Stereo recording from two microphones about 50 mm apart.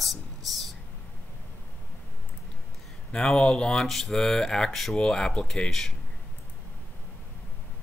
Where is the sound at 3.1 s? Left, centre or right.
Centre.